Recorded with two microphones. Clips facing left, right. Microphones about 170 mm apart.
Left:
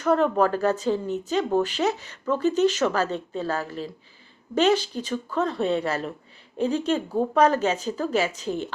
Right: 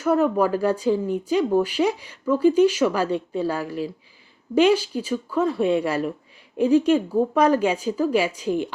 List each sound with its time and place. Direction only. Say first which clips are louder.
0.0 s speech: right 1 dB; 10° right (ahead or behind)